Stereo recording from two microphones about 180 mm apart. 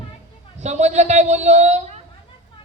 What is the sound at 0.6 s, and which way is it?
A man's voice, 40° right (ahead or behind).